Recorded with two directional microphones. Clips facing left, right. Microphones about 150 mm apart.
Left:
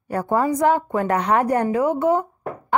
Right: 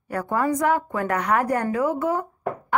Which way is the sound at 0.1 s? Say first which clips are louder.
Left 3 dB; 30° left (ahead or behind).